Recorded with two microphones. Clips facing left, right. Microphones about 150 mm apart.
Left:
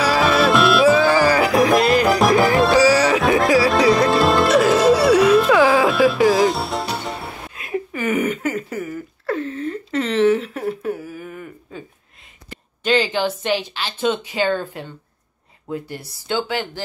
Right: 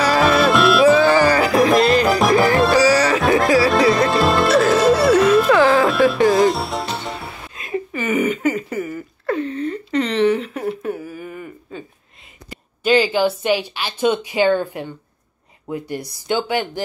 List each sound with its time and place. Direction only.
0.0 s music: centre (ahead or behind)
8.0 s a sound: 10° right (ahead or behind)
12.4 s speech: 10° right (ahead or behind)